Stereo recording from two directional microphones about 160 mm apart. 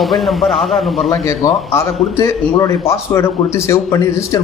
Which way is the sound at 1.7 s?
40° left (ahead or behind).